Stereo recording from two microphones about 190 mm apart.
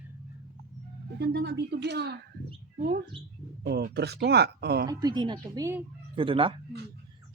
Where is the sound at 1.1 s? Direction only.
60° right (ahead or behind).